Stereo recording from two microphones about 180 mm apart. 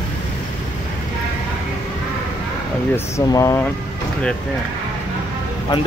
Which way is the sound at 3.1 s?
20° left (ahead or behind).